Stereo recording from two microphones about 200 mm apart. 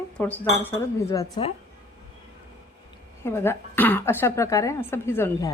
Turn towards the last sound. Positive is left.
turn(degrees=10)  # may be behind; listen again after turning